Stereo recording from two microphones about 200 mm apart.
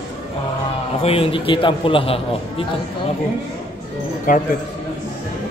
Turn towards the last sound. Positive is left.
turn(degrees=45)  # may be behind; listen again after turning